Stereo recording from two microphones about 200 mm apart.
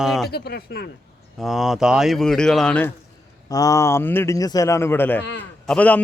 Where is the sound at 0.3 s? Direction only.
55° left (ahead or behind).